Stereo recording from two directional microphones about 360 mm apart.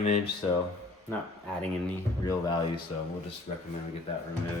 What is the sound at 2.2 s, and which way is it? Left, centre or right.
Speech, centre.